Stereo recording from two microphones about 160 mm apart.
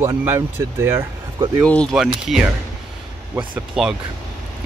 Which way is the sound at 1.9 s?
Centre (ahead or behind).